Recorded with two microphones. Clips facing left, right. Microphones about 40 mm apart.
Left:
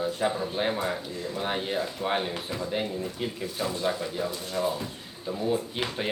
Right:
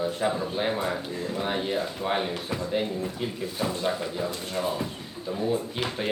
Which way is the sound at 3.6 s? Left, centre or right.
Centre.